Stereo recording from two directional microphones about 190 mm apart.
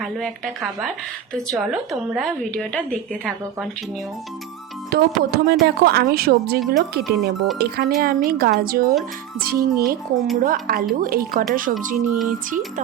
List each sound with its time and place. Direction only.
1.3 s speech: centre (ahead or behind)
4.9 s a woman's voice: 55° right (ahead or behind)